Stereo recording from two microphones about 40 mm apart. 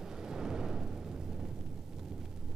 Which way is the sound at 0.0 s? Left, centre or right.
Centre.